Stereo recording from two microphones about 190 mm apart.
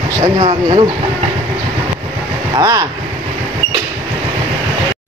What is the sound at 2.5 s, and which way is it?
Speech, 20° right (ahead or behind).